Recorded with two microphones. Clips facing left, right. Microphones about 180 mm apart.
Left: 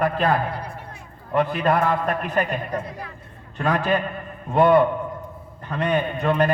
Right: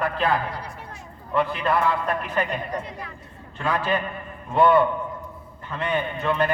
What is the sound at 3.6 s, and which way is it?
A man's voice, 45° left (ahead or behind).